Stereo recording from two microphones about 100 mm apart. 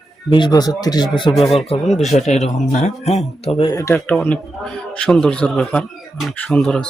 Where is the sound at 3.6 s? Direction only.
35° left (ahead or behind).